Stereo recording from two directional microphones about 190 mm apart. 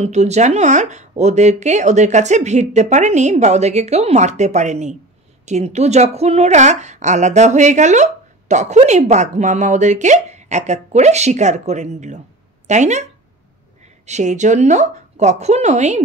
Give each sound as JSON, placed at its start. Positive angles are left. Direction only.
{"t": 0.0, "sound": "a woman's voice", "side_deg": -35}
{"t": 14.0, "sound": "a woman's voice", "side_deg": -40}